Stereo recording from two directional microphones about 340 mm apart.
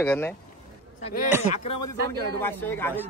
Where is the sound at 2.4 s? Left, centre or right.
Centre.